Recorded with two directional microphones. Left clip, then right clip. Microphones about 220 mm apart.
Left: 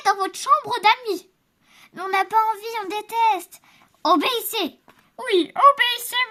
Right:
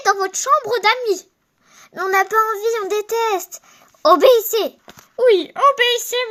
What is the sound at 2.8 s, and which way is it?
A child's voice, 10° left (ahead or behind).